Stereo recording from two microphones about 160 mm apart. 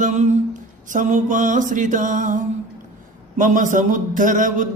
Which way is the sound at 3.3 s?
55° right (ahead or behind).